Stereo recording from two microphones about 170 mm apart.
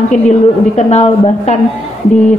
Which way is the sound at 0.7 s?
40° left (ahead or behind).